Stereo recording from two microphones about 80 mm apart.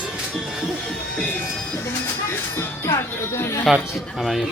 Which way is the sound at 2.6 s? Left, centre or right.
Left.